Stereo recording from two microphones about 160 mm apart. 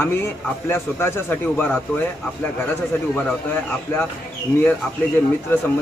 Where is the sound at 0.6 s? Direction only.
15° left (ahead or behind).